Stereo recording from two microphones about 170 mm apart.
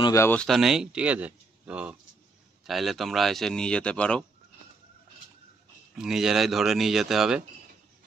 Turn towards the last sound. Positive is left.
turn(degrees=0)  # may be behind; listen again after turning